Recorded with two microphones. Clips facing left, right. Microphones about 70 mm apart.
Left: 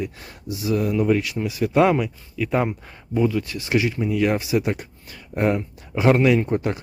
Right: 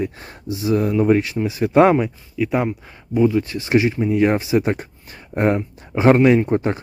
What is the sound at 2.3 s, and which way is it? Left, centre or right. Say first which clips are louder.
Speech: right 2 dB; centre.